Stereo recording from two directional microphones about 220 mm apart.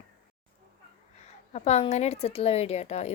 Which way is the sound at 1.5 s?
30° left (ahead or behind).